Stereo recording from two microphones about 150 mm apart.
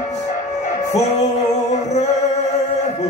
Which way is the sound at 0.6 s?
50° left (ahead or behind).